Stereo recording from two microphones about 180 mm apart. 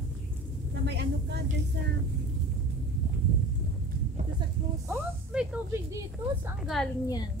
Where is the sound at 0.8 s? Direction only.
70° right (ahead or behind).